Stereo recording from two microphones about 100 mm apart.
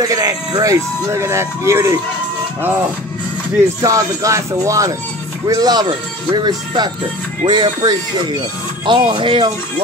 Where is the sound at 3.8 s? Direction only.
35° right (ahead or behind); by 9.5 s 55° right (ahead or behind).